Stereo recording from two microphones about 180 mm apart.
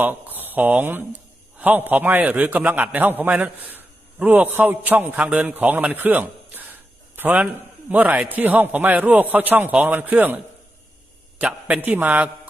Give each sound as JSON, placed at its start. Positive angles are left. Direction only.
{"t": 0.0, "sound": "a man's voice", "side_deg": -10}